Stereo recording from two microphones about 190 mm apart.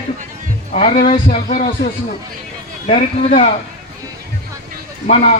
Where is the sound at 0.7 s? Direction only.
35° left (ahead or behind).